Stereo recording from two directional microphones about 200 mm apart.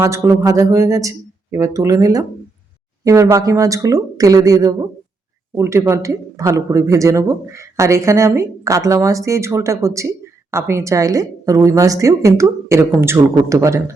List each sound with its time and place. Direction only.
0.0 s speech: 15° right (ahead or behind)